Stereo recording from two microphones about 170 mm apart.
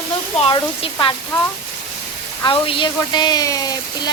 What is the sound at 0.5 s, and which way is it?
Speech, 25° left (ahead or behind).